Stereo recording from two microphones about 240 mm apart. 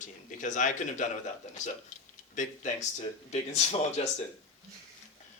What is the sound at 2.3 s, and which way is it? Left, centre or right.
Speech, left.